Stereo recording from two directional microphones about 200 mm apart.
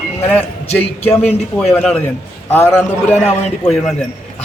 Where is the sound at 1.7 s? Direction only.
Centre (ahead or behind).